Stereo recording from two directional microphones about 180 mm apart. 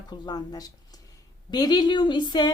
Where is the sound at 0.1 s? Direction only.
20° left (ahead or behind).